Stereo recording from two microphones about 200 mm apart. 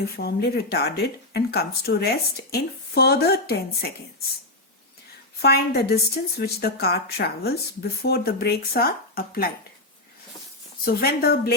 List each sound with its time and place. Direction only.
0.2 s speech: 50° left (ahead or behind)
5.4 s speech: 50° left (ahead or behind)
10.8 s speech: 50° left (ahead or behind)